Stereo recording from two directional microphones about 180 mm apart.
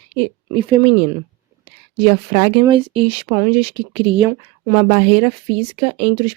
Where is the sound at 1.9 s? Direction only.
30° right (ahead or behind).